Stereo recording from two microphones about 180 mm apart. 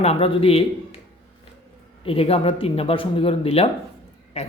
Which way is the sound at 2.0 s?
30° left (ahead or behind).